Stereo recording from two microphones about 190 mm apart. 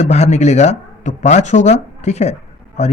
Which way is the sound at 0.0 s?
35° left (ahead or behind).